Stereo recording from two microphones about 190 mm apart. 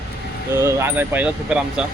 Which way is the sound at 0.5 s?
15° right (ahead or behind).